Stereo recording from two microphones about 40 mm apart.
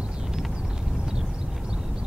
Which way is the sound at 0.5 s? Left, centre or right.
Centre.